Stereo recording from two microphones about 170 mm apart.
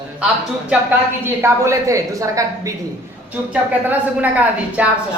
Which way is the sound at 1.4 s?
15° right (ahead or behind).